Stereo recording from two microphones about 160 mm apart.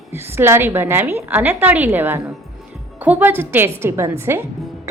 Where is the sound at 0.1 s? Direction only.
15° right (ahead or behind).